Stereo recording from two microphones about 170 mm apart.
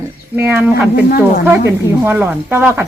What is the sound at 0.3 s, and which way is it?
Speech, 10° right (ahead or behind).